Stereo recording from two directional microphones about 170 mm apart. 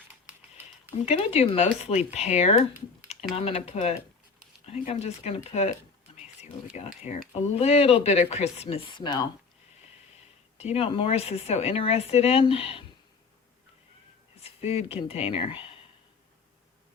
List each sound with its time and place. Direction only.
0.1 s a sound: 10° right (ahead or behind)
1.0 s speech: 35° left (ahead or behind)
6.7 s speech: 40° left (ahead or behind); by 9.2 s 25° left (ahead or behind)
10.6 s speech: 35° left (ahead or behind)
14.4 s speech: 35° left (ahead or behind)